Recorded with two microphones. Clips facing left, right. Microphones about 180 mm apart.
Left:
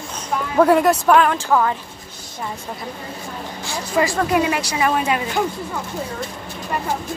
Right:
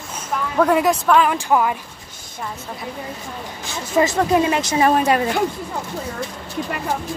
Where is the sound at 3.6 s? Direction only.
20° right (ahead or behind); by 5.2 s 40° right (ahead or behind).